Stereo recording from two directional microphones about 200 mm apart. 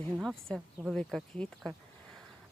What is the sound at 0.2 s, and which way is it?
Speech, centre (ahead or behind).